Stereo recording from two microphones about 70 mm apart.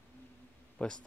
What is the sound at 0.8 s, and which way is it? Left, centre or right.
Speech, centre.